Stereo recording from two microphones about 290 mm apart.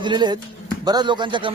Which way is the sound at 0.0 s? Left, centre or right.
Centre.